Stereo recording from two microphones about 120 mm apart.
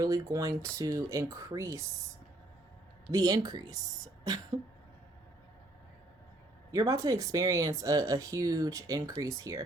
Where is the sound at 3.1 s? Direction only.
30° right (ahead or behind).